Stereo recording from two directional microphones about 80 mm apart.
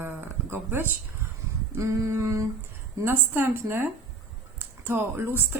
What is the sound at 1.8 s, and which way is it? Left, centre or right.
Humming, right.